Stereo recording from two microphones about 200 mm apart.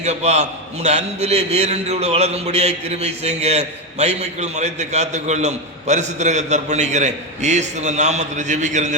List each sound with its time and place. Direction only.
0.0 s a man's voice: 35° right (ahead or behind)